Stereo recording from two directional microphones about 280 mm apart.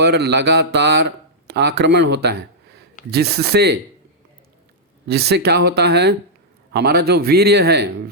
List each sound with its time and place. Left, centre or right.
0.0 s speech: right
5.0 s speech: right